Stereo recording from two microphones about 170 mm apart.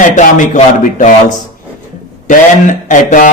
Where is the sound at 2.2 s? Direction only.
50° left (ahead or behind).